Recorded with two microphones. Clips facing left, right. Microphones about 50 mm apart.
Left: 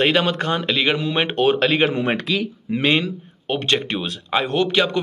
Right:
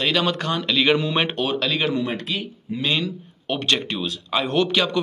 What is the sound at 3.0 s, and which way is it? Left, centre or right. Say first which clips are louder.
Speech: left 1 dB; left.